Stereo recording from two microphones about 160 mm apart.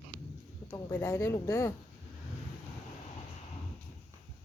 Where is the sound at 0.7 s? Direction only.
20° left (ahead or behind).